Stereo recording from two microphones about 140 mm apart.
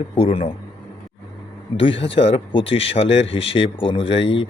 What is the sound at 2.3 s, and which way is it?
Speech, 45° left (ahead or behind).